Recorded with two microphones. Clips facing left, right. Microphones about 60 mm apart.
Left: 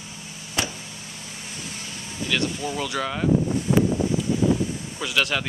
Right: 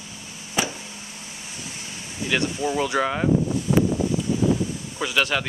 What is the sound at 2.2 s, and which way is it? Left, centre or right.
Speech, centre.